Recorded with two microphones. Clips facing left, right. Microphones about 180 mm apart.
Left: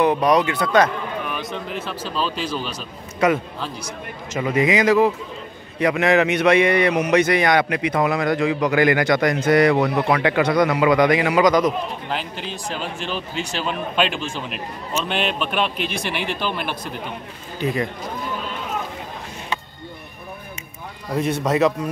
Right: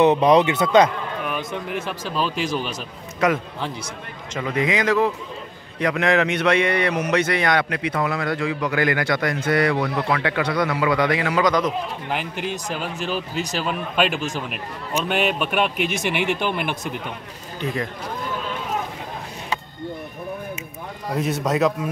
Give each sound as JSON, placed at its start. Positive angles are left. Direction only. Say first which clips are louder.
{"t": 0.0, "sound": "a man's voice", "louder": "right 2 dB", "side_deg": -25}
{"t": 3.2, "sound": "a man's voice", "louder": "left 2 dB", "side_deg": 0}
{"t": 12.1, "sound": "a man's voice", "louder": "right 2 dB", "side_deg": -10}
{"t": 13.3, "sound": "speech", "louder": "right 1 dB", "side_deg": -40}
{"t": 13.6, "sound": "a man's voice", "louder": "even", "side_deg": -5}
{"t": 21.2, "sound": "a man's voice", "louder": "left 2 dB", "side_deg": 0}